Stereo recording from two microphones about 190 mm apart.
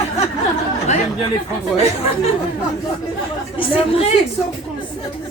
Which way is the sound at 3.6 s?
30° left (ahead or behind).